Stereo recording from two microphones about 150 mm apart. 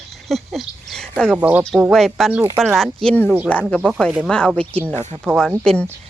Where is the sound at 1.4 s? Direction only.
10° right (ahead or behind).